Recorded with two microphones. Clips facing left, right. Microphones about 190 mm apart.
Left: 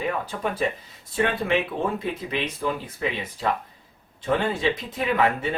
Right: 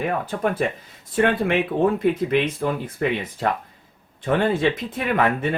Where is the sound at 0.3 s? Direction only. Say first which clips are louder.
Right 4 dB; 55° right (ahead or behind).